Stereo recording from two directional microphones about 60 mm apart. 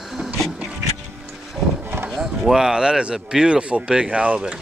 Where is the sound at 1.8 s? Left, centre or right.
Right.